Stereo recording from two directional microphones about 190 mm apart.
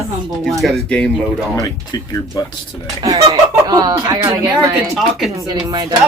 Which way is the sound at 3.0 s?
30° right (ahead or behind).